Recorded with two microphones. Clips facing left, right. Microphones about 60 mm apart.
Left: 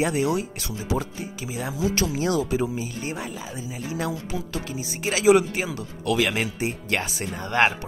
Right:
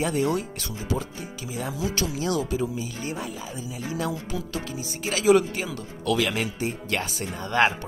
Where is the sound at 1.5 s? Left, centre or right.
Left.